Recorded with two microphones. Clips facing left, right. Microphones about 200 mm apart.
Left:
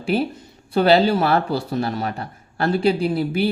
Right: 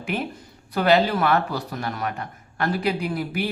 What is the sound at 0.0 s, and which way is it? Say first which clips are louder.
Speech: left 7 dB; 30° left (ahead or behind).